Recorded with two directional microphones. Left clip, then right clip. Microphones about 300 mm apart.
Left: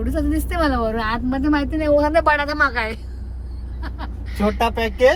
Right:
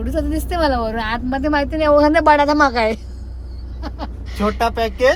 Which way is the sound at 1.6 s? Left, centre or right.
Right.